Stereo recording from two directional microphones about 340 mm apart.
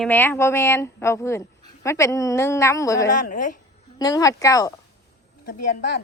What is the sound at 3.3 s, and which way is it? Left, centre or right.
Speech, left.